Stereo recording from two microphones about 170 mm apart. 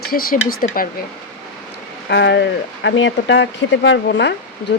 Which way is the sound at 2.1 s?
90° left.